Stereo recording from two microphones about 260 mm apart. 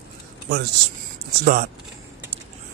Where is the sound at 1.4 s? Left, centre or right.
Right.